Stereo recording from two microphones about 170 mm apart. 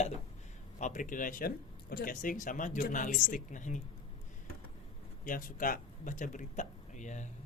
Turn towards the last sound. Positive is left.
turn(degrees=45)  # may be behind; listen again after turning